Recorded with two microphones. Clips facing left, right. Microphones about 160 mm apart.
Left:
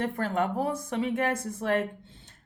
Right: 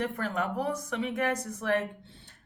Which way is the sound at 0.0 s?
30° left (ahead or behind).